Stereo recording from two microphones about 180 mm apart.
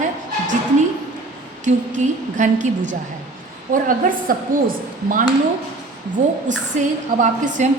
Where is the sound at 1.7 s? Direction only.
40° right (ahead or behind).